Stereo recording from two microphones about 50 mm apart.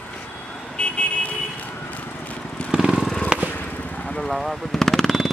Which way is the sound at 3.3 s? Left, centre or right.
Centre.